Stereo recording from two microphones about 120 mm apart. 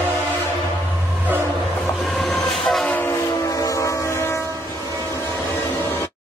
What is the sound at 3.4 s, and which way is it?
Train, 30° left (ahead or behind).